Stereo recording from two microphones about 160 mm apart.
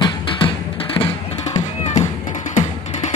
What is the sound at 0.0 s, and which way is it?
Music, 30° left (ahead or behind).